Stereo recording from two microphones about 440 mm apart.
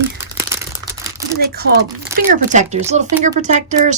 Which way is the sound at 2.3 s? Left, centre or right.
Centre.